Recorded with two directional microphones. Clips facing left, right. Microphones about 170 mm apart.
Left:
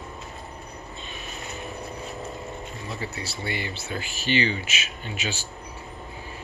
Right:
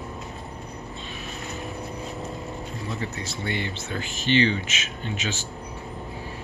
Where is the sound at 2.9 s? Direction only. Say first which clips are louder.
Right 2 dB; 10° left (ahead or behind).